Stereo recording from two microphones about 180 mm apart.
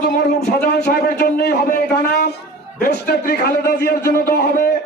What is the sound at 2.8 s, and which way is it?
A man's voice, 55° left (ahead or behind).